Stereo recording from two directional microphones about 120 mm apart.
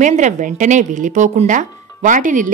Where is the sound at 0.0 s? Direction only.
90° right.